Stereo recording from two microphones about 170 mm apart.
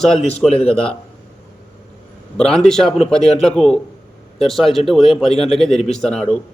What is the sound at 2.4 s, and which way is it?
A man's voice, 5° left (ahead or behind).